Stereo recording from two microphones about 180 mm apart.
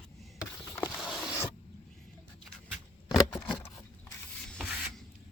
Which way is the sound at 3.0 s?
20° left (ahead or behind).